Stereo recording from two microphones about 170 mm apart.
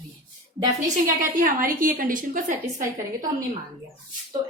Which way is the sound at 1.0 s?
55° right (ahead or behind).